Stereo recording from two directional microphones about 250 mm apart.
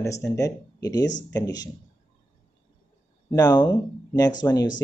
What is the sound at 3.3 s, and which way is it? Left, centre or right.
Speech, centre.